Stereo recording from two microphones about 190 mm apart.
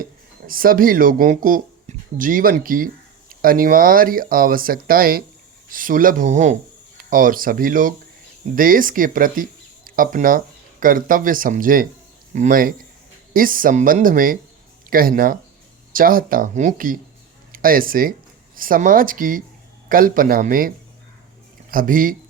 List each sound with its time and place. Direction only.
0.0 s speech: 50° right (ahead or behind)